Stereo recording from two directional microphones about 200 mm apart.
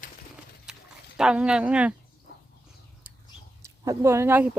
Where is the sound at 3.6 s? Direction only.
15° right (ahead or behind).